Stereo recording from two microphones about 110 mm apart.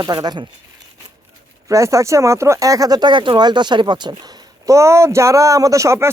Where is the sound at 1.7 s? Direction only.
30° right (ahead or behind).